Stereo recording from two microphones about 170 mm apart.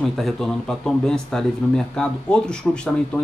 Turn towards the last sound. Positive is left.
turn(degrees=5)  # may be behind; listen again after turning